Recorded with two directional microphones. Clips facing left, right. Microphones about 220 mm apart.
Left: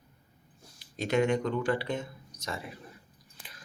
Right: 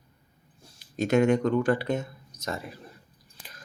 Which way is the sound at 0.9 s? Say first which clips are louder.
Right 5 dB; 45° right (ahead or behind).